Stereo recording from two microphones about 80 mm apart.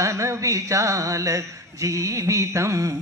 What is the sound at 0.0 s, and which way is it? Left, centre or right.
Speech, right.